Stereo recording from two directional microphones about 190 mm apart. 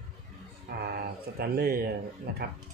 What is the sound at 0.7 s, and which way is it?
Speech, 55° right (ahead or behind).